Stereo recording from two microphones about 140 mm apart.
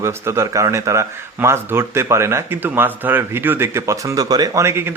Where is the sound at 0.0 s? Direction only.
20° right (ahead or behind).